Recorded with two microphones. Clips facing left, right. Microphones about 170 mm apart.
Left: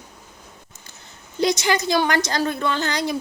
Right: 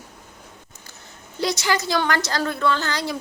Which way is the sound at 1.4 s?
20° left (ahead or behind).